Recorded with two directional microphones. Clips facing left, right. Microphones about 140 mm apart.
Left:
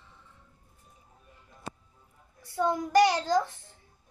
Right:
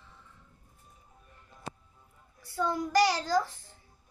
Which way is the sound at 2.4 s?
20° left (ahead or behind).